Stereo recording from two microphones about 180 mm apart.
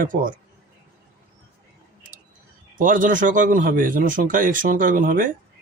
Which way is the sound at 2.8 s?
50° right (ahead or behind).